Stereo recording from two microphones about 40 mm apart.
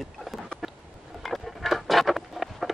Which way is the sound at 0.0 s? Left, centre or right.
Centre.